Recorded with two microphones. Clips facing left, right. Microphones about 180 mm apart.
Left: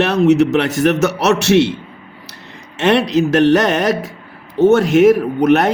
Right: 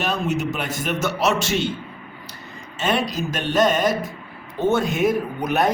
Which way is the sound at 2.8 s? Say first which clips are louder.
Left 9 dB; 75° left (ahead or behind).